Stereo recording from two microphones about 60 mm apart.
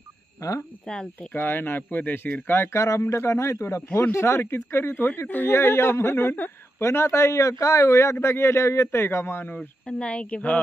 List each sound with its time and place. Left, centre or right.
0.4 s speech: left
0.8 s speech: centre
1.3 s speech: left
2.7 s a man's voice: left
6.8 s speech: left
9.8 s speech: centre